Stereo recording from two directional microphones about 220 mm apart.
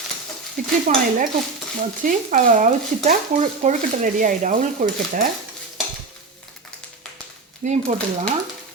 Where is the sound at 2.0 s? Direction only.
40° right (ahead or behind).